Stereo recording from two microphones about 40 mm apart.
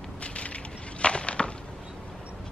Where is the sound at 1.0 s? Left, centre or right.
Left.